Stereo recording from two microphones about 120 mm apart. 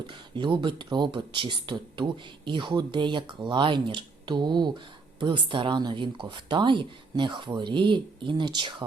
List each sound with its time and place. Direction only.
0.1 s speech: 45° right (ahead or behind)